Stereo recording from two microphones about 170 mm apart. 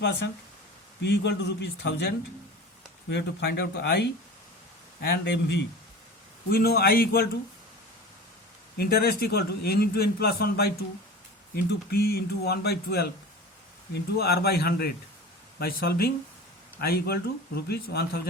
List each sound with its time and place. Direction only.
1.0 s speech: 90° left
3.1 s a man's voice: 85° left
6.5 s speech: 65° left (ahead or behind)
8.8 s a man's voice: 65° left (ahead or behind)